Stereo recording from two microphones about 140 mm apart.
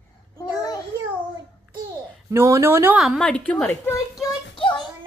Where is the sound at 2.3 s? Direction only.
20° right (ahead or behind).